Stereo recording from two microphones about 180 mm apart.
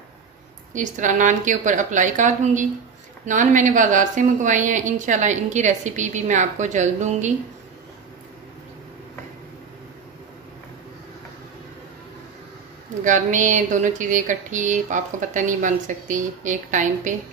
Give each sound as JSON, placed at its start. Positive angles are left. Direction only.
{"t": 0.7, "sound": "speech", "side_deg": -45}
{"t": 13.0, "sound": "speech", "side_deg": -45}